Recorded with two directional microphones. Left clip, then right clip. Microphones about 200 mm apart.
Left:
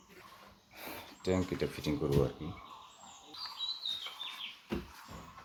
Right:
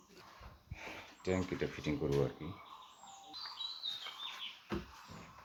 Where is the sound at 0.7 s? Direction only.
25° left (ahead or behind).